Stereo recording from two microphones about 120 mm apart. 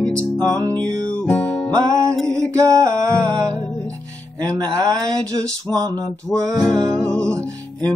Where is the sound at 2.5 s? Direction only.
25° right (ahead or behind).